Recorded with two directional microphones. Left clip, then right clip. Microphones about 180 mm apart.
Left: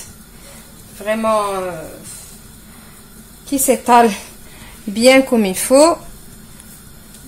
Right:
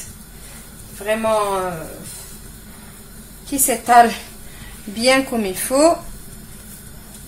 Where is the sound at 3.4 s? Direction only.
45° left (ahead or behind).